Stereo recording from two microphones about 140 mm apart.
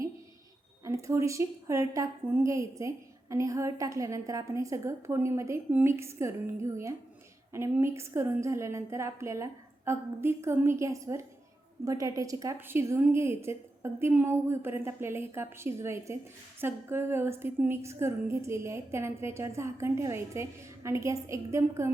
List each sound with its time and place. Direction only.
0.9 s a woman's voice: 20° right (ahead or behind)